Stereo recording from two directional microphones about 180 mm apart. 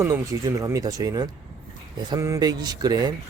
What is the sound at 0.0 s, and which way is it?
Speech, 15° right (ahead or behind).